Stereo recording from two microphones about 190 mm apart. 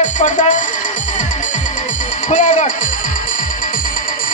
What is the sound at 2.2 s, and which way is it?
Speech, 40° left (ahead or behind).